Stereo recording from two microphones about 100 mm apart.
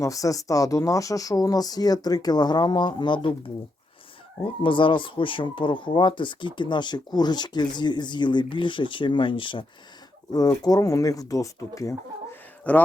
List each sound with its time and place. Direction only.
0.0 s speech: 35° left (ahead or behind); by 9.6 s 55° left (ahead or behind)
10.6 s speech: 35° left (ahead or behind)
12.7 s speech: 15° left (ahead or behind)